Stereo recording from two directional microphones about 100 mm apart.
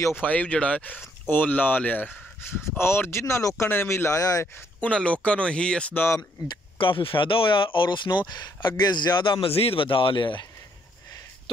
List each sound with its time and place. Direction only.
0.2 s speech: 15° left (ahead or behind); by 4.5 s 35° left (ahead or behind)
4.7 s speech: 10° left (ahead or behind)
6.4 s speech: 50° left (ahead or behind)